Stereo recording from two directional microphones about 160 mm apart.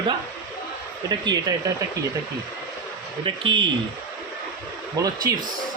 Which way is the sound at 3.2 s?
30° right (ahead or behind).